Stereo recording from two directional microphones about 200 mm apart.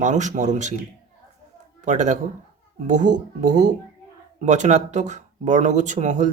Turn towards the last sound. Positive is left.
turn(degrees=-35)  # may be behind; listen again after turning